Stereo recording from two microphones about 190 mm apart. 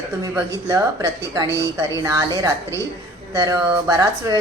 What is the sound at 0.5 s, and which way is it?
A woman's voice, 20° right (ahead or behind).